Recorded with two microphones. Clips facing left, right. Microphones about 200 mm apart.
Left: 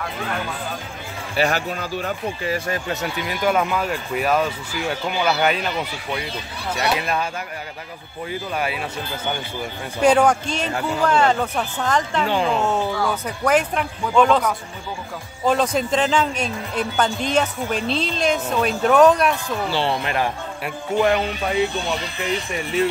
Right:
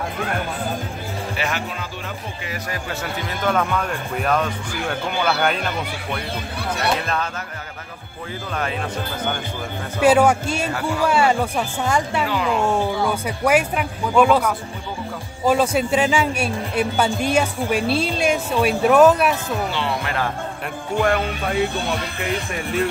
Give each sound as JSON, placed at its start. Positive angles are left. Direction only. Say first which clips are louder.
{"t": 1.3, "sound": "speech", "louder": "left 7 dB", "side_deg": 35}
{"t": 2.9, "sound": "speech", "louder": "left 2 dB", "side_deg": 15}
{"t": 6.7, "sound": "speech", "louder": "left 1 dB", "side_deg": 10}
{"t": 8.5, "sound": "speech", "louder": "right 1 dB", "side_deg": 10}
{"t": 10.0, "sound": "a man's voice", "louder": "right 1 dB", "side_deg": -5}
{"t": 19.7, "sound": "speech", "louder": "left 2 dB", "side_deg": 30}
{"t": 21.0, "sound": "speech", "louder": "left 1 dB", "side_deg": 0}
{"t": 21.5, "sound": "speech", "louder": "right 1 dB", "side_deg": -55}
{"t": 22.5, "sound": "speech", "louder": "left 2 dB", "side_deg": 0}